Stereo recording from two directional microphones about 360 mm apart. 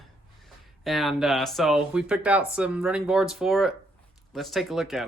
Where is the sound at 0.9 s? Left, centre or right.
Centre.